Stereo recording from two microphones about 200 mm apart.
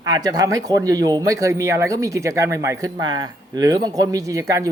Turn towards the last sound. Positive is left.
turn(degrees=-15)  # may be behind; listen again after turning